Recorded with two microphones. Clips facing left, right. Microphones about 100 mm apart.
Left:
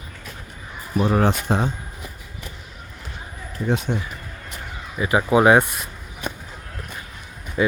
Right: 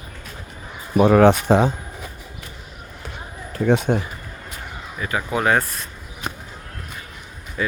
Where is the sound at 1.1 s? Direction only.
80° right.